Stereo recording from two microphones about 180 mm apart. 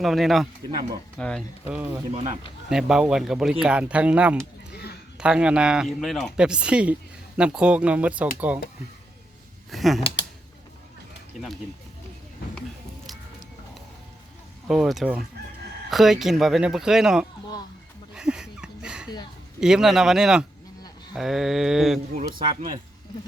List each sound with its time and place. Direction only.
0.0 s speech: centre (ahead or behind)
1.6 s speech: 10° right (ahead or behind)
2.1 s speech: 40° right (ahead or behind)
2.6 s speech: 5° right (ahead or behind)
9.7 s speech: centre (ahead or behind)
14.7 s speech: centre (ahead or behind)
18.1 s a sound: 5° right (ahead or behind)
19.5 s speech: 5° right (ahead or behind)